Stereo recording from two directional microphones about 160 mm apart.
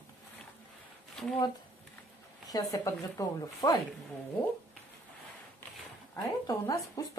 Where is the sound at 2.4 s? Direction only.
20° left (ahead or behind).